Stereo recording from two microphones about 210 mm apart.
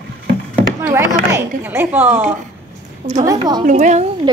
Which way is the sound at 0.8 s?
10° right (ahead or behind).